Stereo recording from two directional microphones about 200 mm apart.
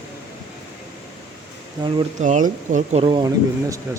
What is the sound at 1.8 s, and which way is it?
Speech, 25° right (ahead or behind).